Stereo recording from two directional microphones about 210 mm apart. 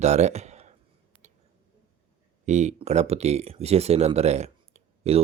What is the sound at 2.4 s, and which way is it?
Speech, 35° right (ahead or behind).